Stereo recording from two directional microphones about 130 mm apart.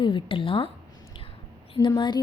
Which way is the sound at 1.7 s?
35° left (ahead or behind).